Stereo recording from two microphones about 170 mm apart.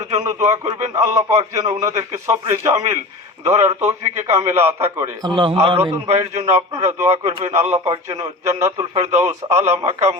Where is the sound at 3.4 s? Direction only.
40° right (ahead or behind).